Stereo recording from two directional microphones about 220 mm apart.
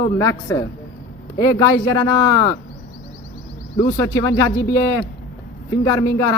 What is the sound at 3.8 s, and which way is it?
Speech, 15° left (ahead or behind).